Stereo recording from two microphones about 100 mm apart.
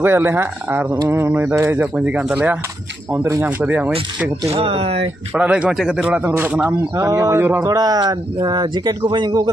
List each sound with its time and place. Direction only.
0.0 s a sound: 20° right (ahead or behind)
2.3 s speech: 15° right (ahead or behind)
4.5 s speech: 70° right (ahead or behind)
5.3 s speech: 15° right (ahead or behind)
7.0 s speech: 30° right (ahead or behind); by 9.5 s 50° right (ahead or behind)